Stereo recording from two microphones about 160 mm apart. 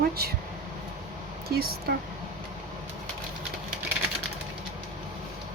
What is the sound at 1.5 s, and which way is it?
Speech, 80° right.